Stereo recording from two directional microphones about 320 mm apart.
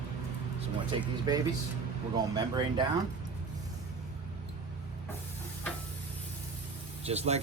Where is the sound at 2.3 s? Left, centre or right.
Centre.